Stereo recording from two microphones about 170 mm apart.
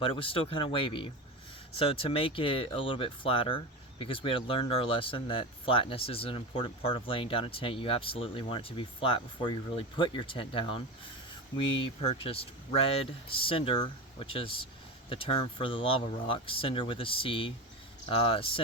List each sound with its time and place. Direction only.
0.0 s speech: 30° left (ahead or behind)